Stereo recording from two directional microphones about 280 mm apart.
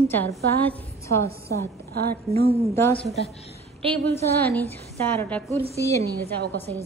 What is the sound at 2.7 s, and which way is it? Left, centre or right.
Speech, centre.